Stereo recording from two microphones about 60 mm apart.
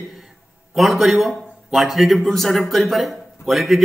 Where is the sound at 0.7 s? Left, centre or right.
Centre.